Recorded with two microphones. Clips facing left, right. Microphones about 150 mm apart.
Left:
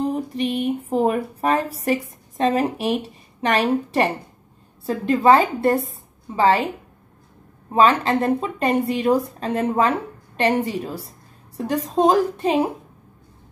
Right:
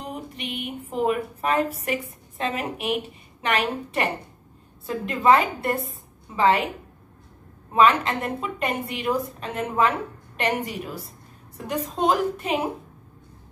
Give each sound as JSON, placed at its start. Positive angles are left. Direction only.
{"t": 0.0, "sound": "a sound", "side_deg": 35}
{"t": 4.8, "sound": "a woman's voice", "side_deg": 30}
{"t": 7.7, "sound": "a woman's voice", "side_deg": 30}